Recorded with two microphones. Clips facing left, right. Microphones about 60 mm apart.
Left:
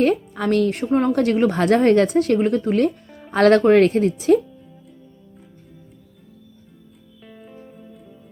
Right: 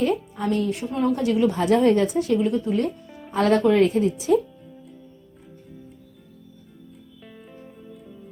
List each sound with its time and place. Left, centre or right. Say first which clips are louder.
0.0 s a woman's voice: left 4 dB; left
0.9 s a woman's voice: left 3 dB; left
7.3 s music: left 3 dB; centre